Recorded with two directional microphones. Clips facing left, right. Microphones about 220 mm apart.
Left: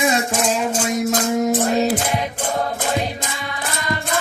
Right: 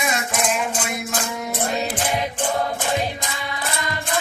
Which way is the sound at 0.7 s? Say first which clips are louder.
Left 7 dB; 40° left (ahead or behind).